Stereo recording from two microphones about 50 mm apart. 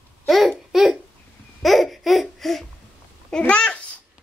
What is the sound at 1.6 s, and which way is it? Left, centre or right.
Laughter, centre.